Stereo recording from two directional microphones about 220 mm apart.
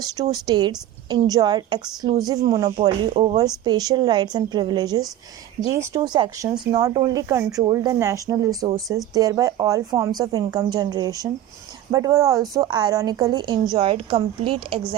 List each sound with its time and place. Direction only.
0.0 s a woman's voice: 15° right (ahead or behind)